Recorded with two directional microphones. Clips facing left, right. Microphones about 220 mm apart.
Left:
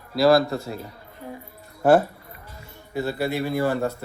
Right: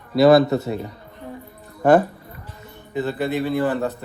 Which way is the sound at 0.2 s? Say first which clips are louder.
Right 5 dB; centre (ahead or behind).